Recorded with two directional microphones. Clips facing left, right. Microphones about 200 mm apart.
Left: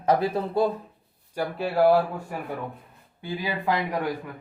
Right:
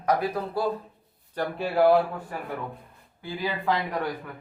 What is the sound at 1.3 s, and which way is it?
Speech, 5° left (ahead or behind).